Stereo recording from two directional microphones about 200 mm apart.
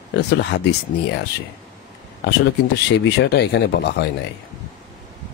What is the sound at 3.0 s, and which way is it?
Speech, 55° left (ahead or behind).